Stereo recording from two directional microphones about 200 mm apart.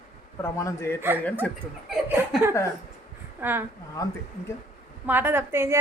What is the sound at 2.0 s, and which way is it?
Speech, 10° right (ahead or behind).